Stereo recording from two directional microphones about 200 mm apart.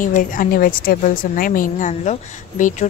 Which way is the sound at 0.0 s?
45° left (ahead or behind).